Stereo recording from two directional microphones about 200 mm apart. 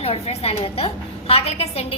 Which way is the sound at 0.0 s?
30° left (ahead or behind).